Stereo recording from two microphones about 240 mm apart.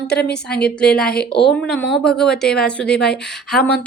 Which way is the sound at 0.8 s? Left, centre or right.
Centre.